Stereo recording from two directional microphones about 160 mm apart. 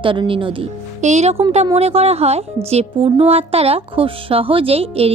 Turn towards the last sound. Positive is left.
turn(degrees=-40)  # may be behind; listen again after turning